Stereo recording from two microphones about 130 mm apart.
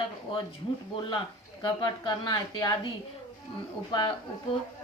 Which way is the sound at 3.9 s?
35° left (ahead or behind).